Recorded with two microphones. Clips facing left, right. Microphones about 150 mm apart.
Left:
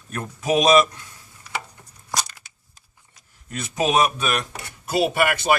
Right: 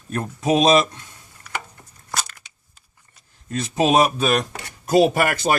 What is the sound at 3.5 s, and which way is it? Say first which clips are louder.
A man's voice: right 3 dB; 30° right (ahead or behind).